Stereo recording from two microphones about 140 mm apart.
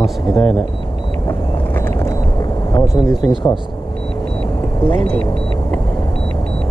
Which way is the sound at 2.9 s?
Centre (ahead or behind).